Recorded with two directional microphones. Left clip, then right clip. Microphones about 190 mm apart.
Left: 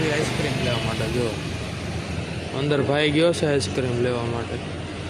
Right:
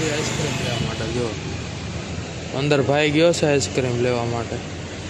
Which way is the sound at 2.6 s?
15° right (ahead or behind).